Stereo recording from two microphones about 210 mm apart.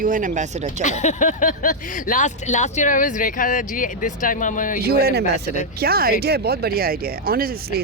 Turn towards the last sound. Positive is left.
turn(degrees=-45)  # may be behind; listen again after turning